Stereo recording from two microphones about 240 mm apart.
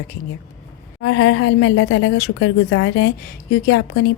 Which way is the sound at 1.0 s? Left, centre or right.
Left.